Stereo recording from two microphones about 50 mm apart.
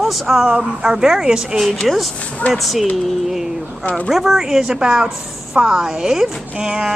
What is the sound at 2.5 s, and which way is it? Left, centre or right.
Speech, centre.